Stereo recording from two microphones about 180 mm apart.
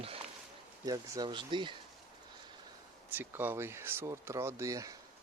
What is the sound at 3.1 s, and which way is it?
Speech, 10° right (ahead or behind).